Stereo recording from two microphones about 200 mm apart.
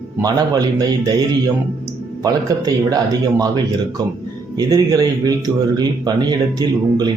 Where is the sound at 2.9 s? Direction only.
20° right (ahead or behind).